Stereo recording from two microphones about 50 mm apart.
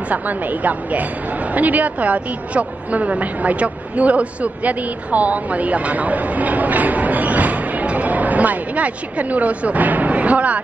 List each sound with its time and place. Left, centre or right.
0.1 s a woman's voice: right